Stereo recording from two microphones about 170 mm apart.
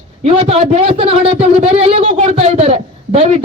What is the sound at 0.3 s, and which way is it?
A man's voice, 35° right (ahead or behind).